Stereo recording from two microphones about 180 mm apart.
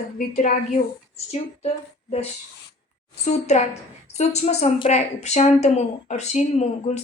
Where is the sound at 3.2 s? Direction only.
40° left (ahead or behind).